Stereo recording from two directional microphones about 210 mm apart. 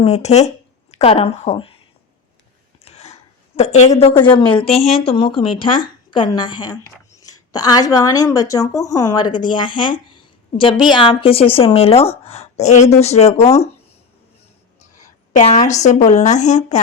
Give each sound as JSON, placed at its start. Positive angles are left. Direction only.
{"t": 0.0, "sound": "a woman's voice", "side_deg": 30}
{"t": 2.8, "sound": "a woman's voice", "side_deg": 30}
{"t": 15.3, "sound": "a woman's voice", "side_deg": 35}